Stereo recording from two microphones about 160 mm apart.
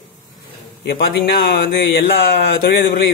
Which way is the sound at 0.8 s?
85° left.